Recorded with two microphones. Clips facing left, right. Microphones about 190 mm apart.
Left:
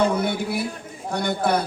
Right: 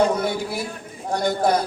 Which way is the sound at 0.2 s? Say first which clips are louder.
Left 1 dB; 60° left (ahead or behind).